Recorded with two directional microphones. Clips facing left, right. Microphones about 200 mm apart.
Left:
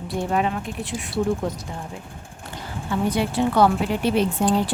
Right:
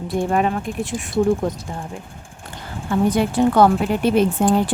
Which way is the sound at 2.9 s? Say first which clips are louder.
Right 5 dB; 50° right (ahead or behind).